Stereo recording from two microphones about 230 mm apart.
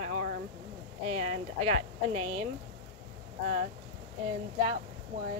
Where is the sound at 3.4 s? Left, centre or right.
Right.